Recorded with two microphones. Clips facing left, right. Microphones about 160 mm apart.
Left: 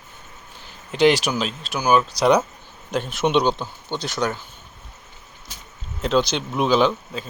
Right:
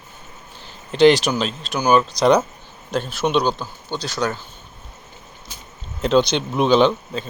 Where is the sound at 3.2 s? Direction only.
25° left (ahead or behind).